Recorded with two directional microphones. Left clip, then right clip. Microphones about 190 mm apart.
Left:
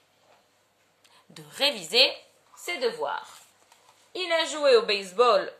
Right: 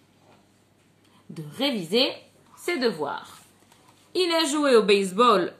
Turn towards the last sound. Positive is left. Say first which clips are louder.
# right 2 dB
turn(degrees=-10)  # may be behind; listen again after turning